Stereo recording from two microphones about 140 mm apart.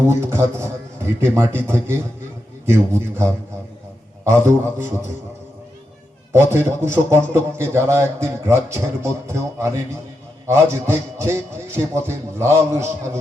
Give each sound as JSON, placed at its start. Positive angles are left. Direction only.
{"t": 0.1, "sound": "a man's voice", "side_deg": -20}
{"t": 6.3, "sound": "a man's voice", "side_deg": -20}